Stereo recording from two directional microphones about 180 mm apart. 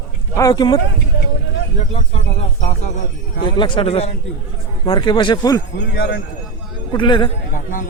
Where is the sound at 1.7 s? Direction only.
35° left (ahead or behind).